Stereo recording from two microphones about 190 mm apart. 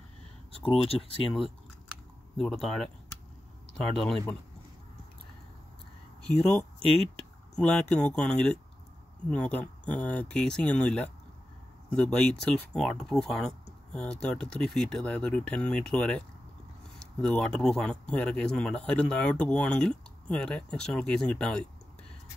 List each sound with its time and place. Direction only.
0.7 s speech: 30° left (ahead or behind)
2.3 s speech: centre (ahead or behind)
7.5 s speech: 5° left (ahead or behind)